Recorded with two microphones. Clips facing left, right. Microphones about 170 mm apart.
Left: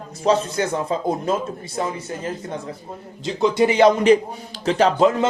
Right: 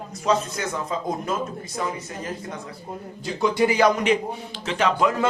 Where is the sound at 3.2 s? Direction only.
25° left (ahead or behind).